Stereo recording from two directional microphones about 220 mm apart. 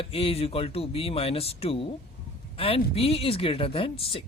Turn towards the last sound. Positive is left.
turn(degrees=25)  # may be behind; listen again after turning